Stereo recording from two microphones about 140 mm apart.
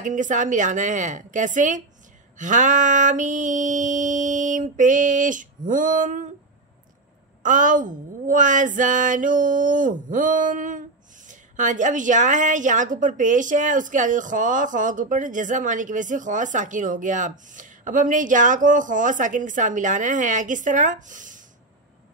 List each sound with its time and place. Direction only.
0.0 s a woman's voice: 65° right (ahead or behind)
7.4 s a sound: 70° right (ahead or behind)
11.2 s a woman's voice: 65° right (ahead or behind)